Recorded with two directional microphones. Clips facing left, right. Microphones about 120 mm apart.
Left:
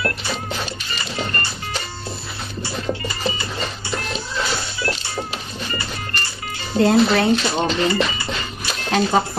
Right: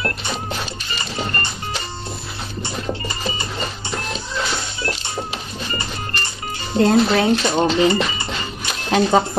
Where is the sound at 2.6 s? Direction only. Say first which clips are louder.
Left 1 dB; 20° right (ahead or behind).